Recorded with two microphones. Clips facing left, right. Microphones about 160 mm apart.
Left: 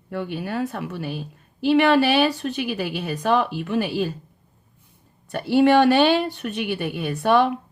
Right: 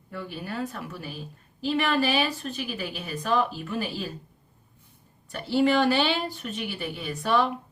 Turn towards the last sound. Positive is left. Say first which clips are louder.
# left 6 dB
turn(degrees=65)  # may be behind; listen again after turning